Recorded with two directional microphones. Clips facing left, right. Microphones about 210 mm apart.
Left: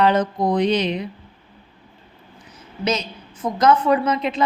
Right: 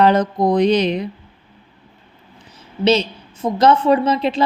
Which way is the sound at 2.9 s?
30° right (ahead or behind).